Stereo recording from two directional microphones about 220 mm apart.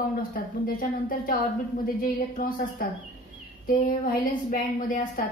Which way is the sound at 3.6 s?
40° left (ahead or behind).